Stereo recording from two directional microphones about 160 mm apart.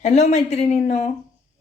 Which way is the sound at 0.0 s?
45° left (ahead or behind).